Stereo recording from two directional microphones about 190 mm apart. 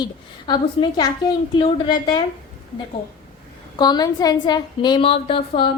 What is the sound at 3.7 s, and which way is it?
A woman's voice, 20° left (ahead or behind).